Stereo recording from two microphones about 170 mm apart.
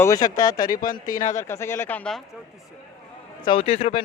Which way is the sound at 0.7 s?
55° left (ahead or behind).